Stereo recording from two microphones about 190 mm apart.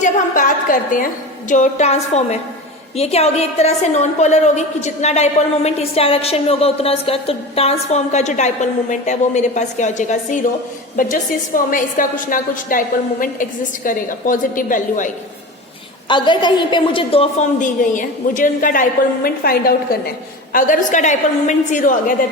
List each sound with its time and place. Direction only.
0.0 s a woman's voice: 45° left (ahead or behind)
16.0 s a woman's voice: 25° left (ahead or behind); by 22.1 s 45° left (ahead or behind)